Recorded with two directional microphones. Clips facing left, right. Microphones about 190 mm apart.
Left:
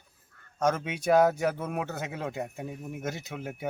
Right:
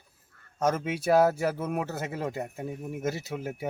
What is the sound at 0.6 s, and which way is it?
Speech, 5° right (ahead or behind).